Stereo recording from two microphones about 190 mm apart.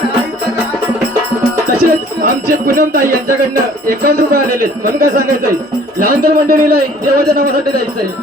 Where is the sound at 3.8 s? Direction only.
50° right (ahead or behind).